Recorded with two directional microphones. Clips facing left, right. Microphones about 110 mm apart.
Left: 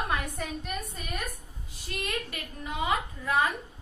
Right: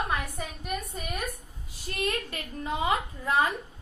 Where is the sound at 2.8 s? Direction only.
30° right (ahead or behind).